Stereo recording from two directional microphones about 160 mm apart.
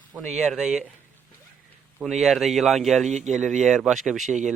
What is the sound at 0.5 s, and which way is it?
Speech, 5° right (ahead or behind).